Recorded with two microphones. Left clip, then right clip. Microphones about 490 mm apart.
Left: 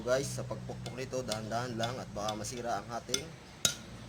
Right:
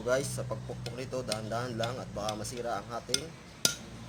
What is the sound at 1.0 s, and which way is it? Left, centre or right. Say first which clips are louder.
Speech: right 1 dB; left.